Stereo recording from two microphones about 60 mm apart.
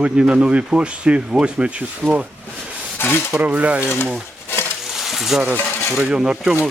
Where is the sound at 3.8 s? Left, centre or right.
Left.